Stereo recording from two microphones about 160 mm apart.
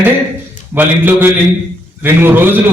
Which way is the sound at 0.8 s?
10° right (ahead or behind).